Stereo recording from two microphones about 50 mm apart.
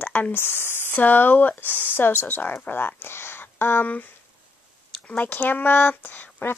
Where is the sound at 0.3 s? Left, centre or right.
Left.